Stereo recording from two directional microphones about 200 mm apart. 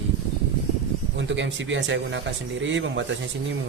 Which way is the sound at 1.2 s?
65° right (ahead or behind).